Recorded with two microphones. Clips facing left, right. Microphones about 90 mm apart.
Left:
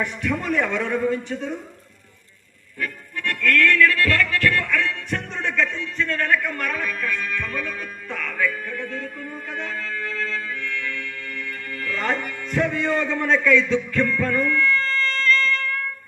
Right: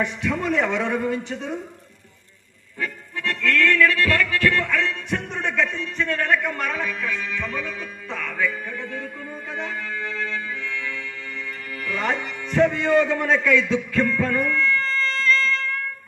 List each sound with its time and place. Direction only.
0.0 s a man's voice: 20° right (ahead or behind)
2.8 s music: 20° right (ahead or behind)